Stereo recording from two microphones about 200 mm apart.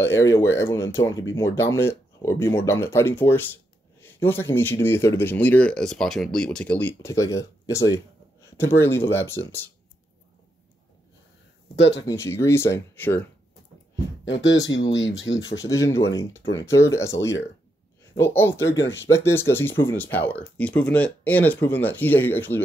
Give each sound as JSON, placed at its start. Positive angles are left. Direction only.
{"t": 0.0, "sound": "speech", "side_deg": 15}
{"t": 11.7, "sound": "speech", "side_deg": 60}
{"t": 12.1, "sound": "speech", "side_deg": 15}
{"t": 14.2, "sound": "speech", "side_deg": 65}
{"t": 15.6, "sound": "speech", "side_deg": 15}